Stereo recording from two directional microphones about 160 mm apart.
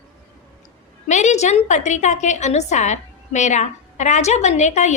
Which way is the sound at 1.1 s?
45° left (ahead or behind).